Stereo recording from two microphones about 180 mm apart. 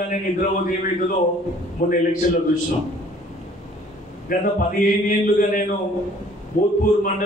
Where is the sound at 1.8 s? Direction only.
50° left (ahead or behind).